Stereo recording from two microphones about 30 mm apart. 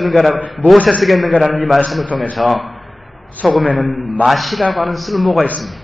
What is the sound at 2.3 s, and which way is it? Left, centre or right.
Speech, centre.